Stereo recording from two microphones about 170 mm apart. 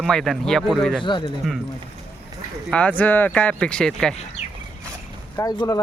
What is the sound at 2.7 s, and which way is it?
Speech, 10° left (ahead or behind).